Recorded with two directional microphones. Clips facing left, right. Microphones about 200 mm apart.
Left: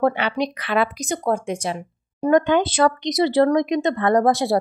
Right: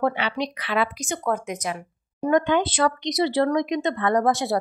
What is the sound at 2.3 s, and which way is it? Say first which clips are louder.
Speech: left 3 dB; 40° left (ahead or behind).